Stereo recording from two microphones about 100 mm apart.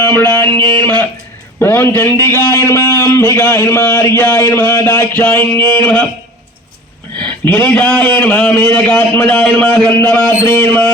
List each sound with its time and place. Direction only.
0.0 s music: 20° left (ahead or behind)
0.7 s a man's voice: 20° left (ahead or behind)
7.2 s a man's voice: 20° left (ahead or behind)